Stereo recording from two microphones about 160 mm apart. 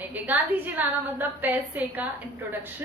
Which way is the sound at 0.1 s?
10° right (ahead or behind).